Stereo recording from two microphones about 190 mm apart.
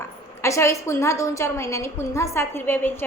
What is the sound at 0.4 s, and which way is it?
A woman's voice, 15° left (ahead or behind).